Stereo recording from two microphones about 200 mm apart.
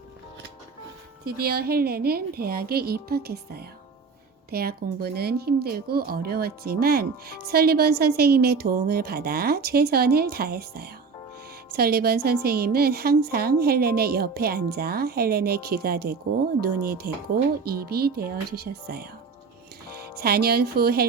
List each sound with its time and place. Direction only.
1.2 s a woman's voice: 50° right (ahead or behind)
20.1 s a woman's voice: 50° right (ahead or behind)